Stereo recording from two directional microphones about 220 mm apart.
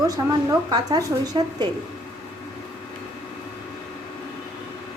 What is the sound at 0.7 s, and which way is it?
Speech, 15° right (ahead or behind).